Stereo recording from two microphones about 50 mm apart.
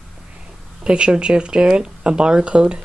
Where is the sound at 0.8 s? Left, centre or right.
Centre.